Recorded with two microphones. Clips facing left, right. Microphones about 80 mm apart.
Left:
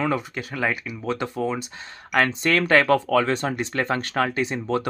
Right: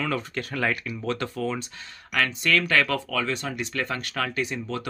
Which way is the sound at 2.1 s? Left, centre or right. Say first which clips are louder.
Left 4 dB; left.